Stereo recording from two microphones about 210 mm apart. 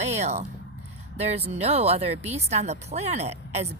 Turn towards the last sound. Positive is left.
turn(degrees=-30)  # may be behind; listen again after turning